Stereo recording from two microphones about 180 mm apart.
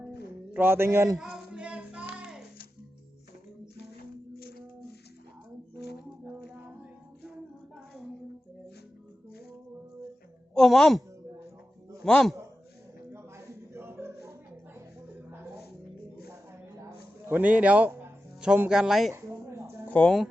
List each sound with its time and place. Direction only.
0.5 s a man's voice: 10° right (ahead or behind)
1.2 s a sound: 5° right (ahead or behind)
2.1 s music: 5° right (ahead or behind)
4.4 s music: 60° left (ahead or behind)
6.2 s music: 10° right (ahead or behind)
10.5 s a woman's voice: centre (ahead or behind)
12.0 s a woman's voice: 5° left (ahead or behind)
13.1 s music: 15° right (ahead or behind)
16.8 s music: 10° right (ahead or behind)
19.1 s a sound: 15° right (ahead or behind)
19.9 s a woman's voice: 5° left (ahead or behind)